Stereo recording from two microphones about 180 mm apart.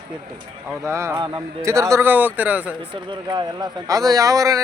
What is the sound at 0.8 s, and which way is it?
A man's voice, 15° right (ahead or behind).